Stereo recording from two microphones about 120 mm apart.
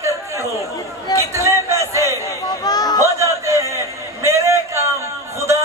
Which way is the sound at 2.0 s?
35° left (ahead or behind).